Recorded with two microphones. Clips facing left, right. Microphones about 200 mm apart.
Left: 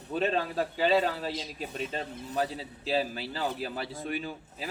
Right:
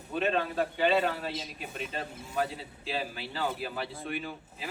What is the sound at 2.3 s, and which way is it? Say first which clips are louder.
A man's voice: left 1 dB; 40° left (ahead or behind).